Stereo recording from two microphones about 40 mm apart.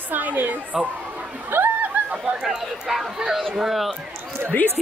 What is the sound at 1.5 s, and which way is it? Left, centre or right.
Chatter, right.